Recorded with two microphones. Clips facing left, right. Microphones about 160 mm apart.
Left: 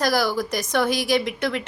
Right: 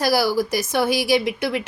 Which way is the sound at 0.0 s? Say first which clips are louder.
Right 3 dB; 10° right (ahead or behind).